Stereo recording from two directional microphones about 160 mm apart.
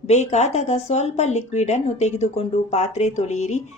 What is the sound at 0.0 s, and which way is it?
Speech, 45° left (ahead or behind).